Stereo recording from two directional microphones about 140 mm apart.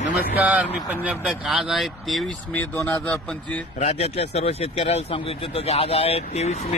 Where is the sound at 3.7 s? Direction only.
50° left (ahead or behind).